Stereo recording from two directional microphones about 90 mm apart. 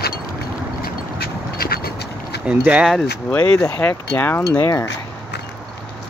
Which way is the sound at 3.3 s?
15° left (ahead or behind).